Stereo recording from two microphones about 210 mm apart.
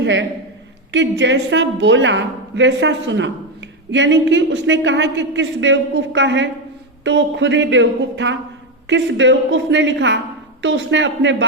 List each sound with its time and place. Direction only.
0.0 s a man's voice: 60° right (ahead or behind)